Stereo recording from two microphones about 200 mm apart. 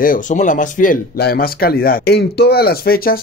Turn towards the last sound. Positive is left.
turn(degrees=50)  # may be behind; listen again after turning